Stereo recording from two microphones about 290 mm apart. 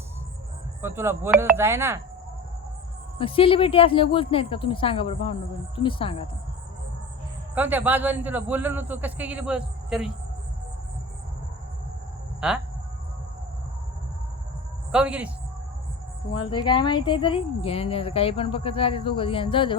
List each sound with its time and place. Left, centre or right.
0.8 s speech: centre
3.2 s a woman's voice: centre
7.5 s a man's voice: centre
12.4 s a man's voice: centre
14.9 s a man's voice: centre
16.3 s a woman's voice: centre